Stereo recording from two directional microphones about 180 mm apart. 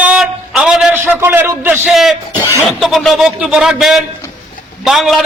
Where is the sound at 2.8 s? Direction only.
Centre (ahead or behind).